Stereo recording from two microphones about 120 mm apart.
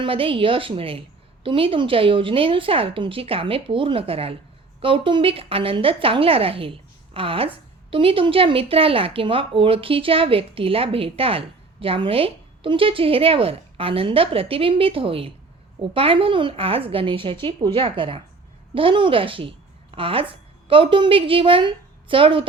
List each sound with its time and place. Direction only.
0.0 s a woman's voice: 50° right (ahead or behind)